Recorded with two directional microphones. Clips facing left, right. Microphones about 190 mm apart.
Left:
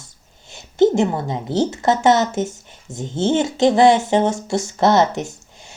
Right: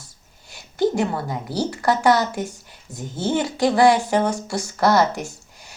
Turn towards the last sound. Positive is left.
turn(degrees=20)  # may be behind; listen again after turning